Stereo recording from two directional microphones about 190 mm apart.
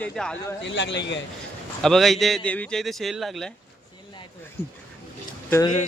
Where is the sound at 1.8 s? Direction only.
Centre (ahead or behind).